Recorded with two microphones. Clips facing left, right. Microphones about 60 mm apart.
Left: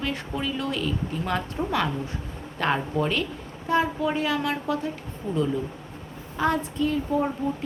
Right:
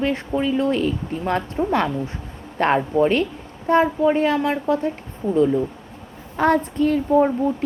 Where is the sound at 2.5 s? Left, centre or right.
Right.